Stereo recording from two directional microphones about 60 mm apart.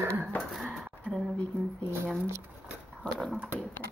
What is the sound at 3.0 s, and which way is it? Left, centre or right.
Speech, centre.